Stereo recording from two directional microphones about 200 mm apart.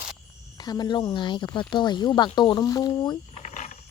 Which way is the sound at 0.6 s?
20° left (ahead or behind).